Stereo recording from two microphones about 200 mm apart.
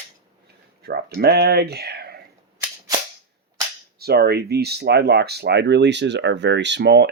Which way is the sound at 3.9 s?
50° right (ahead or behind).